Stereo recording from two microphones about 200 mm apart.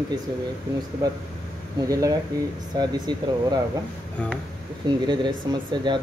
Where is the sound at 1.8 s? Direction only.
15° right (ahead or behind).